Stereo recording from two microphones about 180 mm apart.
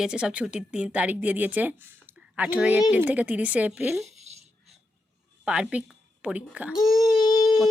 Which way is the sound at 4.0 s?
35° right (ahead or behind).